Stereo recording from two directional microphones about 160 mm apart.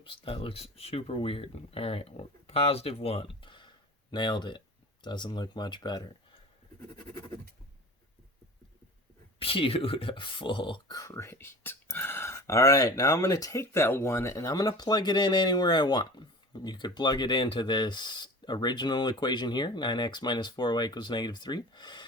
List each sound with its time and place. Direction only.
0.0 s speech: 35° left (ahead or behind)
9.4 s speech: 35° left (ahead or behind)